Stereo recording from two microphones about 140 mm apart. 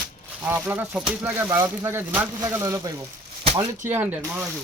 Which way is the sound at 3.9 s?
15° right (ahead or behind).